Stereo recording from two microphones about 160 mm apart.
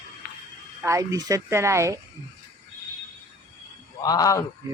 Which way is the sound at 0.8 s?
20° right (ahead or behind).